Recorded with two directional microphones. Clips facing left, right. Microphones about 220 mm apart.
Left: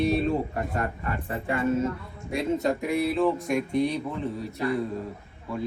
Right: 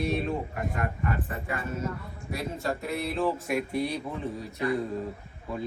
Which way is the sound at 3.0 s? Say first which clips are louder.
Left 4 dB; centre (ahead or behind).